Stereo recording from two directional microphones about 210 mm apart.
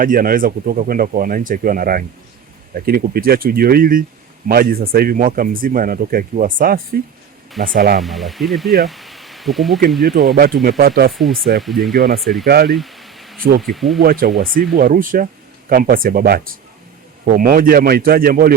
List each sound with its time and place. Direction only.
0.0 s speech: 40° right (ahead or behind)
8.0 s speech: centre (ahead or behind)
10.3 s speech: 45° right (ahead or behind)
11.1 s speech: centre (ahead or behind)
11.9 s speech: 45° right (ahead or behind)
12.2 s speech: centre (ahead or behind)
12.5 s speech: 45° right (ahead or behind)
12.7 s a sound: centre (ahead or behind)
13.6 s speech: centre (ahead or behind)
14.0 s speech: 45° right (ahead or behind)